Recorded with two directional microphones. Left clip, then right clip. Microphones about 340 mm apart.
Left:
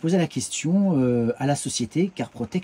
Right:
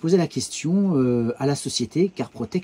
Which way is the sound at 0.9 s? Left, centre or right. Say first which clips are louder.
Right 1 dB; centre.